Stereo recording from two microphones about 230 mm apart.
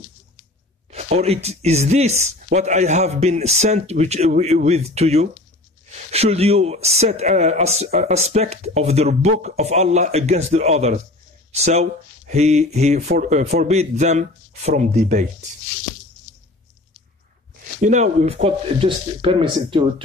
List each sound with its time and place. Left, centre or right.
0.8 s speech: right
17.8 s speech: right